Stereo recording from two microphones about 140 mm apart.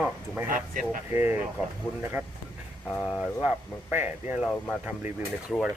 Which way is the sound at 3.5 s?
10° right (ahead or behind).